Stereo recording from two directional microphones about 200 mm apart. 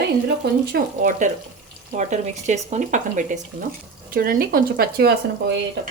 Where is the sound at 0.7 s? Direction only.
40° right (ahead or behind).